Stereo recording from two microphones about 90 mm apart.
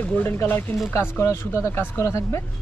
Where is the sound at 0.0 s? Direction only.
20° left (ahead or behind).